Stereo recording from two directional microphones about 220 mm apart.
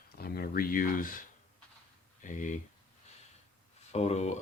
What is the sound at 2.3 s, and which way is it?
Speech, 35° left (ahead or behind).